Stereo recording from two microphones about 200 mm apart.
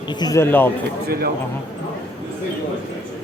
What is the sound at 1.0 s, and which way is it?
Speech, 50° right (ahead or behind).